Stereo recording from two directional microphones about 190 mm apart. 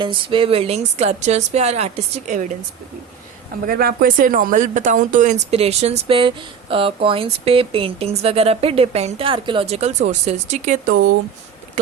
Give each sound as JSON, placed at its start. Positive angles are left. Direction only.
{"t": 0.0, "sound": "speech", "side_deg": -25}
{"t": 3.7, "sound": "speech", "side_deg": -50}